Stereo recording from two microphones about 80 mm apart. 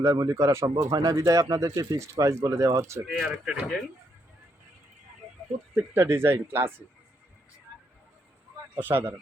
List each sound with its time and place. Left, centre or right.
0.0 s speech: right
0.9 s speech: right
3.1 s speech: centre
5.7 s speech: right
8.7 s speech: right